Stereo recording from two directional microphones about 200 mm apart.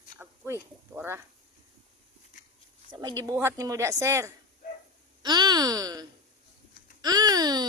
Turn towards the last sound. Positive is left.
turn(degrees=-20)  # may be behind; listen again after turning